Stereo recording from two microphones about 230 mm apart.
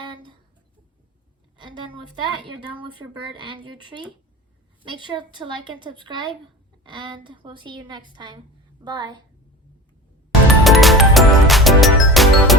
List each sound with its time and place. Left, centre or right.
0.0 s a sound: right
1.5 s a woman's voice: right
10.6 s music: centre